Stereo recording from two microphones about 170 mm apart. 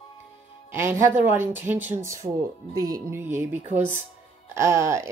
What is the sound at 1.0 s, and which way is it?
Speech, 15° right (ahead or behind).